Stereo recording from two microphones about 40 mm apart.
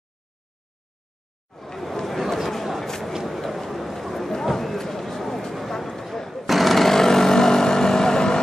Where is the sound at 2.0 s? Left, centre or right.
Centre.